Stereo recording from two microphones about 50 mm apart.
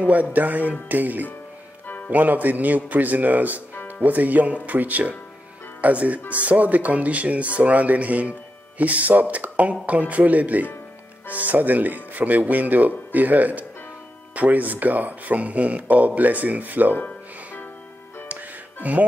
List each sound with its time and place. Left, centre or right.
0.0 s speech: right
18.3 s music: right